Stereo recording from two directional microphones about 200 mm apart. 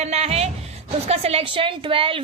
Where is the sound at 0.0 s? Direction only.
35° right (ahead or behind).